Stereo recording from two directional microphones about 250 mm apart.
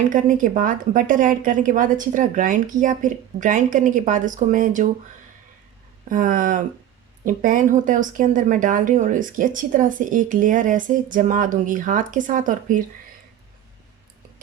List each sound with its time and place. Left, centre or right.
0.1 s a woman's voice: right
6.1 s a woman's voice: right